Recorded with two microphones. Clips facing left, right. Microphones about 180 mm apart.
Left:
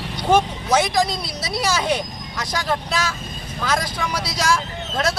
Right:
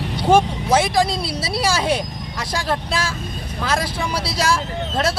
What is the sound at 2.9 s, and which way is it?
Speech, 30° right (ahead or behind).